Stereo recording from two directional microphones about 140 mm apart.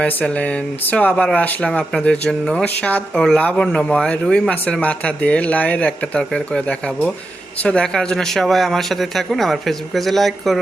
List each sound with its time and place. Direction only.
0.0 s speech: 10° left (ahead or behind)